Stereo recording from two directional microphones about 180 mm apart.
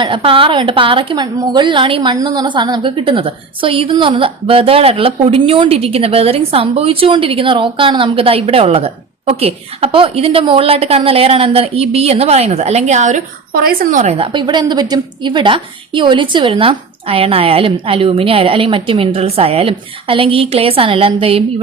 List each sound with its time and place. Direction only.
0.0 s a woman's voice: 30° right (ahead or behind)